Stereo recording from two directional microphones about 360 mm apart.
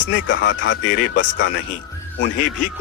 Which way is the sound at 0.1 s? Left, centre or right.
Left.